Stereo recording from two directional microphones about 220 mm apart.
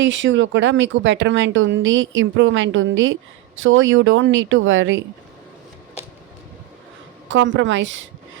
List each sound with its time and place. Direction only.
0.0 s speech: 60° right (ahead or behind)
7.3 s speech: 55° right (ahead or behind)